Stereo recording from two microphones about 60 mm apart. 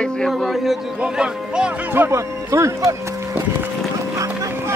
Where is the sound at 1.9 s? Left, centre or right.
Right.